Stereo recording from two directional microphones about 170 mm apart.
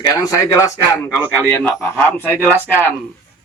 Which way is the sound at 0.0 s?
20° left (ahead or behind).